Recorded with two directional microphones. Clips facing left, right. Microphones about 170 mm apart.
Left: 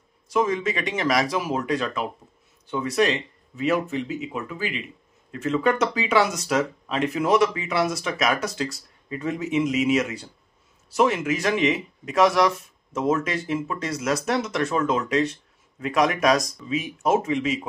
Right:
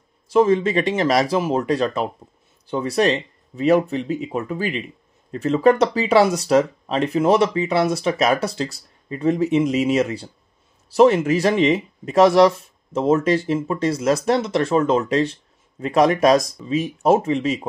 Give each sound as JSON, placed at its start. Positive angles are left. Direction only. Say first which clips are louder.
{"t": 0.3, "sound": "speech", "louder": "right 7 dB", "side_deg": -30}